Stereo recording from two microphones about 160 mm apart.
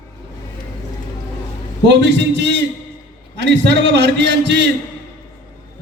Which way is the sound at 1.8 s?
90° right.